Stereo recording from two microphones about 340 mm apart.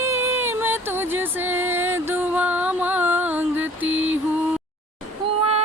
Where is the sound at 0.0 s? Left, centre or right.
Centre.